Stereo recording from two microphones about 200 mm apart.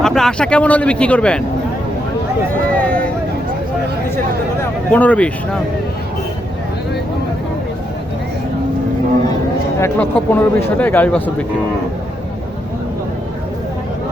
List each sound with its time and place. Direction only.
0.0 s speech: 5° left (ahead or behind)
2.7 s vehicle: 5° left (ahead or behind)
4.9 s speech: 5° left (ahead or behind)
9.7 s speech: 10° left (ahead or behind)